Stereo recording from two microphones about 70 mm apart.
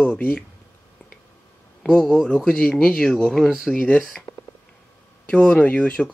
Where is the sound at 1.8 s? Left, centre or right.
Centre.